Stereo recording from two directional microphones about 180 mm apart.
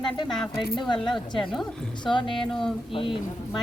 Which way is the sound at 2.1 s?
25° left (ahead or behind).